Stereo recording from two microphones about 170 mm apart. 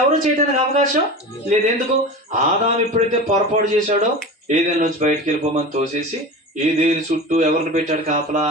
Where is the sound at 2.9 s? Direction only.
45° right (ahead or behind).